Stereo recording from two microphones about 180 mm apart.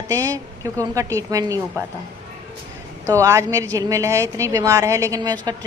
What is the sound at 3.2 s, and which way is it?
A woman's voice, 15° right (ahead or behind).